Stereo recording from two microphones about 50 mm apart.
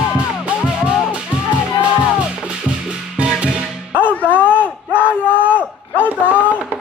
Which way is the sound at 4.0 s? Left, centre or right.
Left.